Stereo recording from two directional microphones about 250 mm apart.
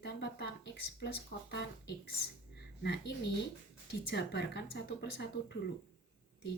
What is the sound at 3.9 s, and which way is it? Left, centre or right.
Speech, left.